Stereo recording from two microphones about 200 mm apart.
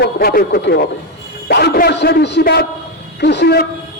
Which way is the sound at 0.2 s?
50° left (ahead or behind).